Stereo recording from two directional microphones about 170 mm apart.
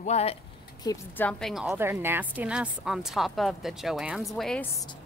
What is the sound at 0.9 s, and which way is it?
Speech, 25° left (ahead or behind).